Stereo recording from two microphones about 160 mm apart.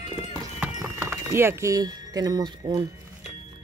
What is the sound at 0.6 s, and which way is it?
Speech, 10° right (ahead or behind).